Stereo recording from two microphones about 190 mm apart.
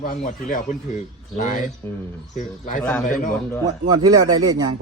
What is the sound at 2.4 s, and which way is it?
Speech, 45° left (ahead or behind).